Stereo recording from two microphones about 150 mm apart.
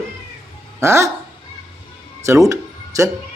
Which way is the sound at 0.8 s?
20° right (ahead or behind).